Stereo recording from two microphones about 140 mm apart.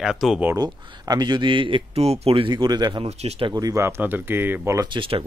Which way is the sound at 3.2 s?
50° right (ahead or behind).